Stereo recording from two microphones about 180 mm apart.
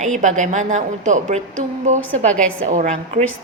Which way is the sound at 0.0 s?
45° right (ahead or behind).